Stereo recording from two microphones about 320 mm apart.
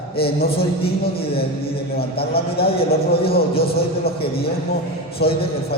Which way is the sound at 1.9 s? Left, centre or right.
Left.